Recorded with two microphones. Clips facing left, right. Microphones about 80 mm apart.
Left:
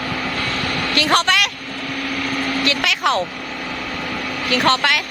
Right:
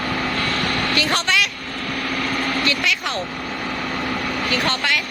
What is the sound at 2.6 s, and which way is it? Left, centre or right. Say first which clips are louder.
Vehicle: left 3 dB; left.